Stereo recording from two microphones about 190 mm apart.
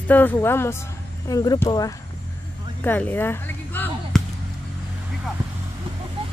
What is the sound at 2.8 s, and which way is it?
Speech, 10° left (ahead or behind).